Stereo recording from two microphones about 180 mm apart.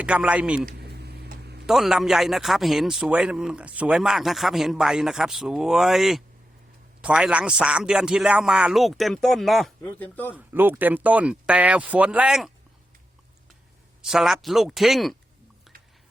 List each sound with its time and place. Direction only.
0.0 s speech: 5° right (ahead or behind)
0.6 s a sound: 65° right (ahead or behind)
1.6 s speech: centre (ahead or behind)
10.3 s speech: 10° right (ahead or behind)
14.0 s speech: centre (ahead or behind)